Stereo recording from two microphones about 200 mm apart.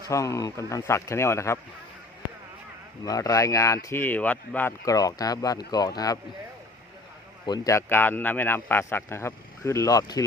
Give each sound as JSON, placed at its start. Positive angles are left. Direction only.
{"t": 0.1, "sound": "a man's voice", "side_deg": 15}
{"t": 3.0, "sound": "a man's voice", "side_deg": 15}
{"t": 7.4, "sound": "a man's voice", "side_deg": 20}